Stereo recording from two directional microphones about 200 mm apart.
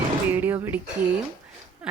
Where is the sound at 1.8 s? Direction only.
5° right (ahead or behind).